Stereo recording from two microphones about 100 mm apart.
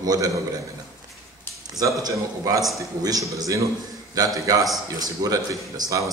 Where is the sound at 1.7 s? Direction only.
35° right (ahead or behind).